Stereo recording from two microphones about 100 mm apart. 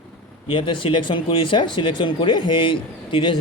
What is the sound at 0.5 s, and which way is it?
Speech, 55° left (ahead or behind).